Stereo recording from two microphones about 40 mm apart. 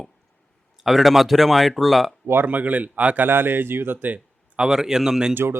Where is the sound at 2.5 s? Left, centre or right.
Right.